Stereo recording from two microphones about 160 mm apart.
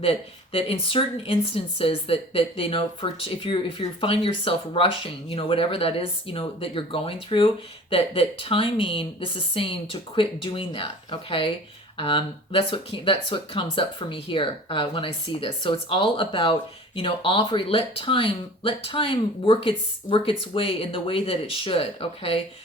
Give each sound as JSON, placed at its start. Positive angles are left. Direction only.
{"t": 0.0, "sound": "a woman's voice", "side_deg": 35}